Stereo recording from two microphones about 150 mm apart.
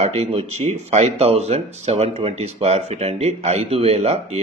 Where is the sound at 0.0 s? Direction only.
45° right (ahead or behind).